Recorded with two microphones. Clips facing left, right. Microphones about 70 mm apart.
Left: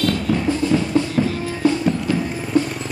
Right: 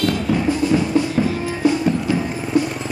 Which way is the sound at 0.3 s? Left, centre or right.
Centre.